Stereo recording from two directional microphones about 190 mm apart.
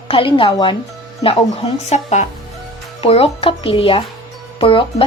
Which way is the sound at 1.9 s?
35° left (ahead or behind).